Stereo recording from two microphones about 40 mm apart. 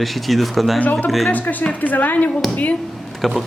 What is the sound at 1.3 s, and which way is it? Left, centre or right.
A woman's voice, left.